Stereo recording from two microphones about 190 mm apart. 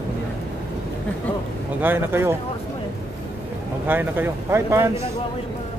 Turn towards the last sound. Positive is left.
turn(degrees=-10)  # may be behind; listen again after turning